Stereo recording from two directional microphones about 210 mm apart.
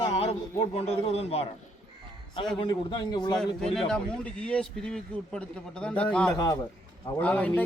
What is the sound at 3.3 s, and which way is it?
Speech, centre (ahead or behind).